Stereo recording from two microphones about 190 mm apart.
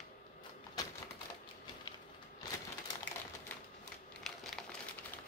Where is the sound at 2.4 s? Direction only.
20° left (ahead or behind).